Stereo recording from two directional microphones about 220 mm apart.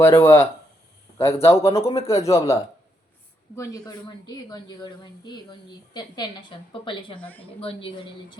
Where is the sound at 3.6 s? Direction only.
15° left (ahead or behind).